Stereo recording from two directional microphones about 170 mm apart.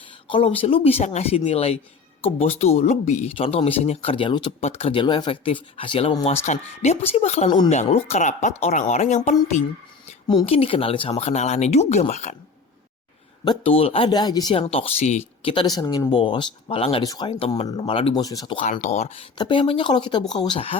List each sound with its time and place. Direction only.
0.3 s speech: 35° left (ahead or behind)
10.4 s speech: 35° left (ahead or behind)
13.4 s speech: 30° left (ahead or behind)
18.2 s speech: 20° left (ahead or behind)
18.6 s speech: 45° left (ahead or behind)